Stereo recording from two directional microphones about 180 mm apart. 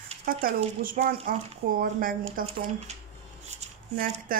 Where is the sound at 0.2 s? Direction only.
55° right (ahead or behind).